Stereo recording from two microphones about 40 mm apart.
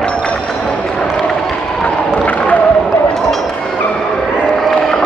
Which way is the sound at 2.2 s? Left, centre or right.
Left.